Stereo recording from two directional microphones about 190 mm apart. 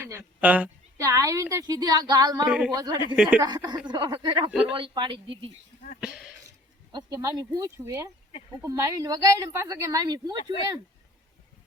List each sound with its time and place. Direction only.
0.0 s a woman's voice: 15° right (ahead or behind)
2.5 s speech: 5° right (ahead or behind)
2.7 s speech: 20° right (ahead or behind)
3.2 s a woman's voice: 10° right (ahead or behind)
3.4 s speech: 20° right (ahead or behind)
6.0 s speech: 5° right (ahead or behind)
6.9 s a woman's voice: 20° right (ahead or behind)